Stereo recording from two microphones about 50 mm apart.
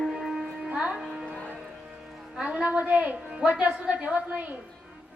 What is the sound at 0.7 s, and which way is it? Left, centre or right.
Music, right.